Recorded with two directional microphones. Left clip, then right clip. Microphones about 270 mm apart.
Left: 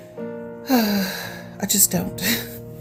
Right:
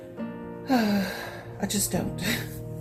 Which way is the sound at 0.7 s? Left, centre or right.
Left.